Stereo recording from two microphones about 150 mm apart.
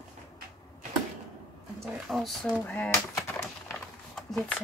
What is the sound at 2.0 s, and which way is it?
Speech, centre (ahead or behind).